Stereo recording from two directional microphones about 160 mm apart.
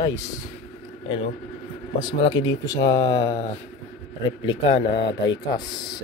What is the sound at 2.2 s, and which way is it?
Speech, 30° left (ahead or behind).